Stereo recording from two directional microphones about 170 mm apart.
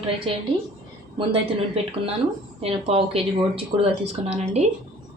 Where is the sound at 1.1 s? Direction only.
30° right (ahead or behind).